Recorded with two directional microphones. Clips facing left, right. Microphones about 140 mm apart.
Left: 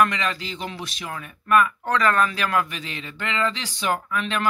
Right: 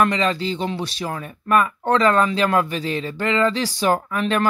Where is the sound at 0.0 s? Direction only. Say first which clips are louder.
Right 3 dB; 30° right (ahead or behind).